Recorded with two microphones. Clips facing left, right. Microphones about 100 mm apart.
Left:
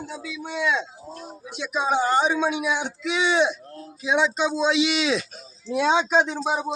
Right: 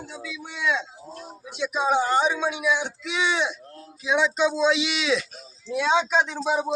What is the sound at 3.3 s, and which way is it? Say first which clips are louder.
Speech: left 5 dB; 25° left (ahead or behind).